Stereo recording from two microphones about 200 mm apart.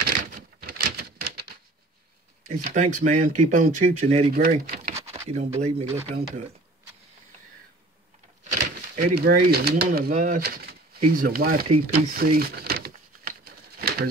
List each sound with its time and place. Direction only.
0.0 s patter: 45° right (ahead or behind)
2.4 s speech: 40° right (ahead or behind)
8.5 s speech: 45° right (ahead or behind)
12.1 s a sound: 50° right (ahead or behind)
13.7 s pigeon: 50° right (ahead or behind)